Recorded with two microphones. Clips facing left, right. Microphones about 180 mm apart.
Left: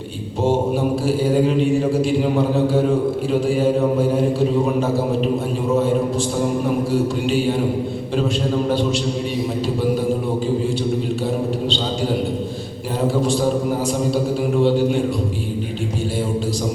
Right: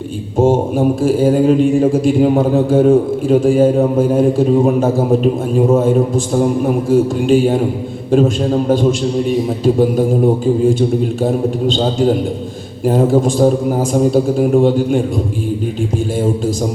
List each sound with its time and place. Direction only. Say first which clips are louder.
0.3 s mantra: right 6 dB; 50° right (ahead or behind)
6.9 s mantra: right 7 dB; 50° right (ahead or behind)
8.7 s mantra: right 6 dB; 45° right (ahead or behind)
10.4 s mantra: right 7 dB; 50° right (ahead or behind)